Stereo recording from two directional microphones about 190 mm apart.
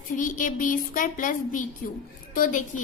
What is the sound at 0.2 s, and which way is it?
A woman's voice, 45° left (ahead or behind).